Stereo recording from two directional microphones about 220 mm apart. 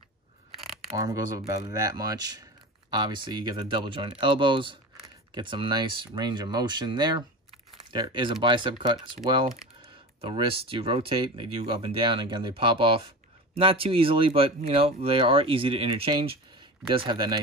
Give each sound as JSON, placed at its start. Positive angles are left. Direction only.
{"t": 0.9, "sound": "speech", "side_deg": -15}